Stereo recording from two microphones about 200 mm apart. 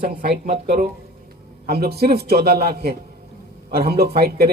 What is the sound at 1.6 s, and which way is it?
A man's voice, 50° right (ahead or behind).